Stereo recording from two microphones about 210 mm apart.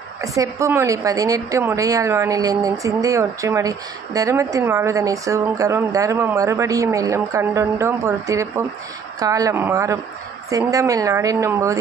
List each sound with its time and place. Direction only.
0.4 s a woman's voice: 15° right (ahead or behind)